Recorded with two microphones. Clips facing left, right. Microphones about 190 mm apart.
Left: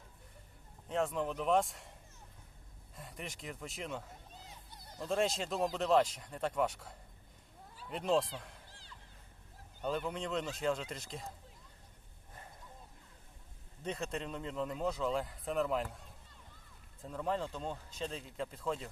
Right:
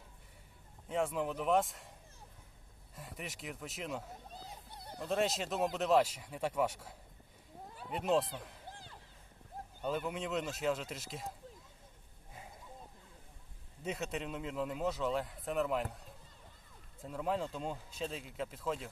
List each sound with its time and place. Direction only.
0.9 s speech: 5° right (ahead or behind)
4.3 s a sound: 35° right (ahead or behind)
4.9 s speech: centre (ahead or behind)
8.7 s music: 55° right (ahead or behind)
9.8 s speech: 5° right (ahead or behind)
13.8 s speech: 5° right (ahead or behind)
17.0 s speech: 5° right (ahead or behind)